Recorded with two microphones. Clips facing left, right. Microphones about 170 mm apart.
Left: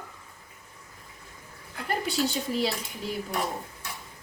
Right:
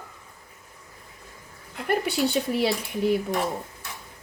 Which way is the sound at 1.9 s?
60° right (ahead or behind).